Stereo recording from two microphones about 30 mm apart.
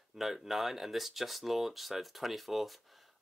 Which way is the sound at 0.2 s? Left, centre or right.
Centre.